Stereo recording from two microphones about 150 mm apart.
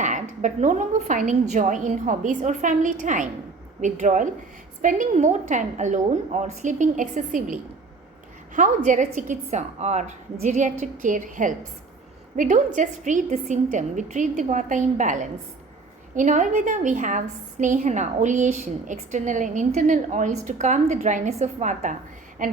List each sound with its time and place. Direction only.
0.0 s a woman's voice: 55° right (ahead or behind)